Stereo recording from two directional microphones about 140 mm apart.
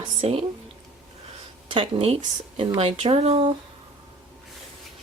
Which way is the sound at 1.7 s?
40° right (ahead or behind).